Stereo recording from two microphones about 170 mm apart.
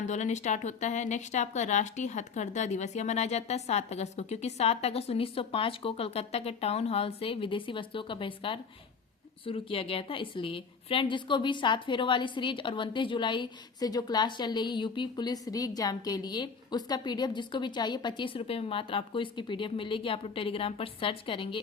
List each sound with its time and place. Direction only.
0.0 s a woman's voice: 45° left (ahead or behind)